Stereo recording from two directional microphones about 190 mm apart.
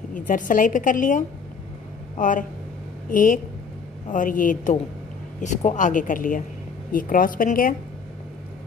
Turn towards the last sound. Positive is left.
turn(degrees=45)  # may be behind; listen again after turning